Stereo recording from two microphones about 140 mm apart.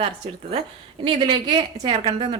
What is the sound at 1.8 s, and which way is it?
Speech, 45° right (ahead or behind).